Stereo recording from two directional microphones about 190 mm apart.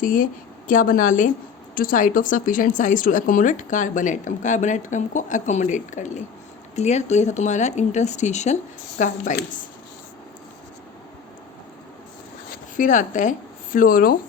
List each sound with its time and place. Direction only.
0.0 s a woman's voice: 45° left (ahead or behind)
12.7 s a woman's voice: 40° left (ahead or behind)